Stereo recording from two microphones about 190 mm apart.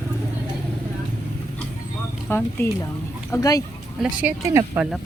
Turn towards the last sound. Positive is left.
turn(degrees=-15)  # may be behind; listen again after turning